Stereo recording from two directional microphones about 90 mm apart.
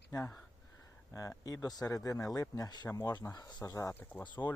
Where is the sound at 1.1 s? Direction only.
35° left (ahead or behind).